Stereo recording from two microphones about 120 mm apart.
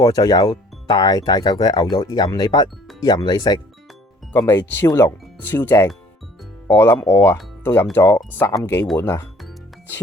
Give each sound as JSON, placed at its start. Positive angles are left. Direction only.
{"t": 0.0, "sound": "speech", "side_deg": 30}
{"t": 4.4, "sound": "speech", "side_deg": 20}